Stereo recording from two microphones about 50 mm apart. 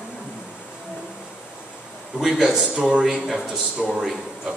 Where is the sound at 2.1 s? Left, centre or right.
Centre.